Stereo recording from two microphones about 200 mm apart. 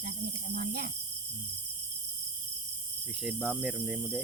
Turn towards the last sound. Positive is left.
turn(degrees=-5)  # may be behind; listen again after turning